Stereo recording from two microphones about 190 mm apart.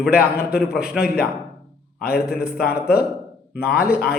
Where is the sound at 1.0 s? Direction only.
55° left (ahead or behind).